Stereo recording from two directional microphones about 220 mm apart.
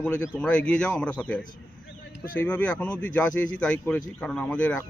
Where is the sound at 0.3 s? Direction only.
5° left (ahead or behind).